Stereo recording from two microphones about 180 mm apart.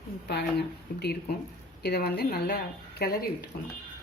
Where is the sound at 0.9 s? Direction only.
60° left (ahead or behind).